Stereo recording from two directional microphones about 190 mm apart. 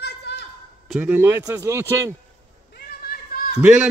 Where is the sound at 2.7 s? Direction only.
55° left (ahead or behind).